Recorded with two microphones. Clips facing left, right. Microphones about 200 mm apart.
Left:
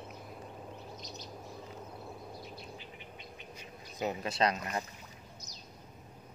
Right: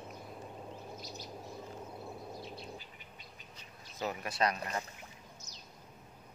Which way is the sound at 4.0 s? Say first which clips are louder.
Left 3 dB; 20° left (ahead or behind).